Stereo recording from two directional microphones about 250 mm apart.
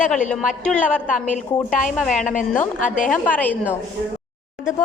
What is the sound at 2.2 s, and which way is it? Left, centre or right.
Speech, left.